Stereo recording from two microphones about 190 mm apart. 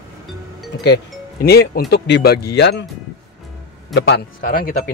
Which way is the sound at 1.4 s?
55° left (ahead or behind).